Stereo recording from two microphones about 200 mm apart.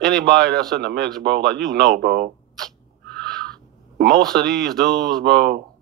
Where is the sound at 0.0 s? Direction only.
55° right (ahead or behind).